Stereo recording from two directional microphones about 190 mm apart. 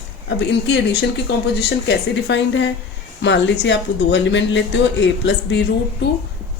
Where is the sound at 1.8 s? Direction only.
70° left (ahead or behind).